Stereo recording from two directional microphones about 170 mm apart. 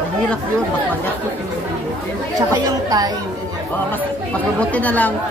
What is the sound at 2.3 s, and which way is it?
Speech, 20° right (ahead or behind).